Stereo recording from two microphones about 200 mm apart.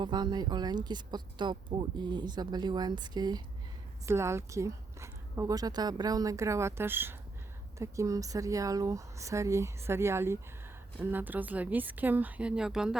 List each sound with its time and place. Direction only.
0.0 s a woman's voice: 20° right (ahead or behind); by 13.0 s 5° right (ahead or behind)